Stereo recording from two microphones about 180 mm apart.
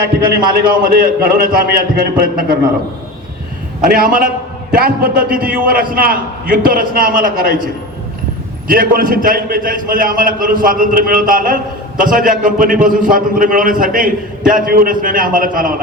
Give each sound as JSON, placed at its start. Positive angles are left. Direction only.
{"t": 0.5, "sound": "a man's voice", "side_deg": -55}
{"t": 3.8, "sound": "a man's voice", "side_deg": -50}
{"t": 8.6, "sound": "a man's voice", "side_deg": -50}